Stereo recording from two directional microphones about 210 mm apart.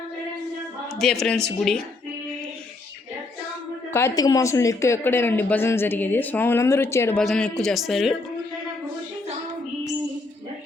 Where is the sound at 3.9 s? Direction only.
15° left (ahead or behind); by 8.1 s centre (ahead or behind).